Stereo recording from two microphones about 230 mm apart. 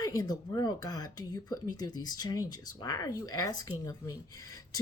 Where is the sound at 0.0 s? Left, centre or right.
Centre.